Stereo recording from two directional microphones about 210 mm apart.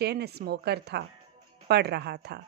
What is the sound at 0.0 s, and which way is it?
Speech, 50° right (ahead or behind).